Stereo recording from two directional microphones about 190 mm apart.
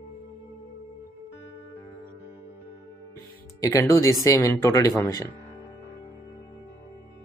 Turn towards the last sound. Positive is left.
turn(degrees=15)  # may be behind; listen again after turning